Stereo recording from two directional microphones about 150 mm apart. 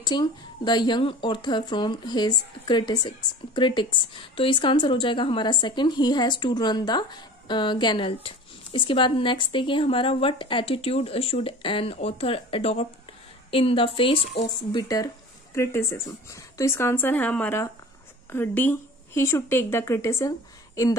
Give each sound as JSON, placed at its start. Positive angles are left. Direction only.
{"t": 0.0, "sound": "a woman's voice", "side_deg": 30}
{"t": 14.7, "sound": "speech", "side_deg": 25}